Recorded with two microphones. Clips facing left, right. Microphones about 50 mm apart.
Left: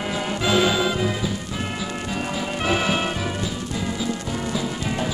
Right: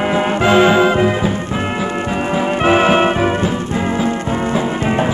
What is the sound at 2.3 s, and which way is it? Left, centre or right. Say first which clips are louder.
Music: right 11 dB; right.